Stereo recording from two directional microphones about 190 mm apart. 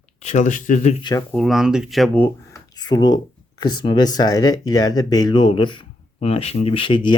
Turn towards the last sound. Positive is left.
turn(degrees=25)  # may be behind; listen again after turning